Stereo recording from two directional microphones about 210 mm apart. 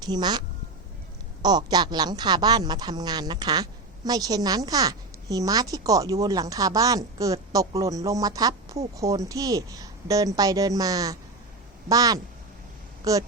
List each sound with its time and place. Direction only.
0.0 s speech: 20° right (ahead or behind)